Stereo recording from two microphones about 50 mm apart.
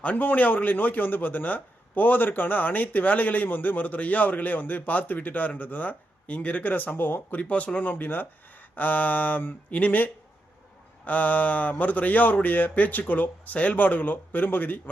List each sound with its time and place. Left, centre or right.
0.0 s a man's voice: left